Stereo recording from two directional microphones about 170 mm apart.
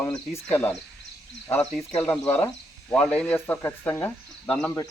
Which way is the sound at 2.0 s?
15° left (ahead or behind).